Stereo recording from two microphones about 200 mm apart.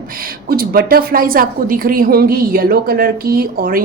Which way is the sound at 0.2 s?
50° right (ahead or behind).